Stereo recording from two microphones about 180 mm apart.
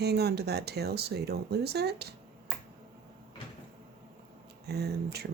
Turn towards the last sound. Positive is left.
turn(degrees=-65)  # may be behind; listen again after turning